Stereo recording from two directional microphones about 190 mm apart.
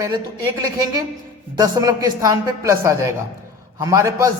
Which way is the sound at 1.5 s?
20° right (ahead or behind).